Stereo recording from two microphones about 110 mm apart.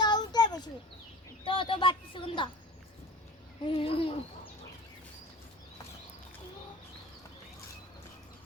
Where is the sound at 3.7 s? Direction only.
55° left (ahead or behind).